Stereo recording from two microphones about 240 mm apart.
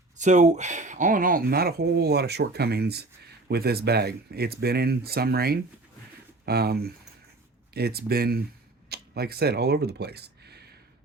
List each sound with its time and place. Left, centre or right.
0.2 s speech: right